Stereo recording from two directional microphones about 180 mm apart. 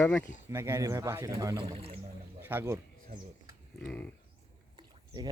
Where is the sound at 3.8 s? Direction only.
10° left (ahead or behind).